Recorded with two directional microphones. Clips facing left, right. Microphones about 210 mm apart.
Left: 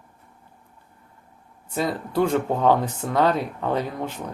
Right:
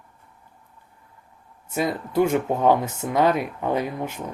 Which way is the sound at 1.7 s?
15° right (ahead or behind).